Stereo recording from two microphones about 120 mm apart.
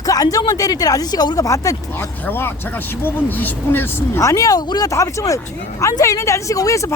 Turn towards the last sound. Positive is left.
turn(degrees=25)  # may be behind; listen again after turning